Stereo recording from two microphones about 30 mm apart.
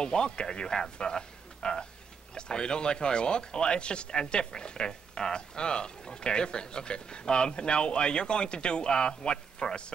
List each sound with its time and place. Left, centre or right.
0.0 s speech: left
0.7 s speech: centre
0.9 s a sound: left
2.3 s speech: left